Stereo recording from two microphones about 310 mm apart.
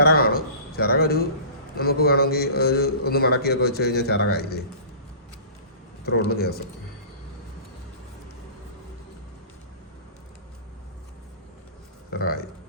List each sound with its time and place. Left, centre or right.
0.0 s a sound: left
1.8 s a man's voice: left
6.1 s a man's voice: left
12.1 s speech: left